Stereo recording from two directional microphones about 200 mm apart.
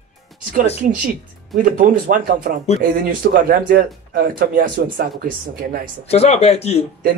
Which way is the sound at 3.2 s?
50° right (ahead or behind).